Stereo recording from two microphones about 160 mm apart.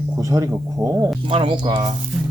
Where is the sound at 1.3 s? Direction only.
30° right (ahead or behind).